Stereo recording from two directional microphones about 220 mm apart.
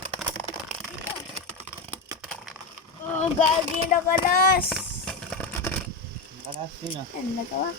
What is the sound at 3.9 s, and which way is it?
Speech, 40° left (ahead or behind).